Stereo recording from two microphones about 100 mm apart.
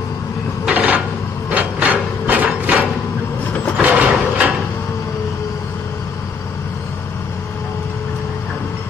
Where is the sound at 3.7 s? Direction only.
15° right (ahead or behind).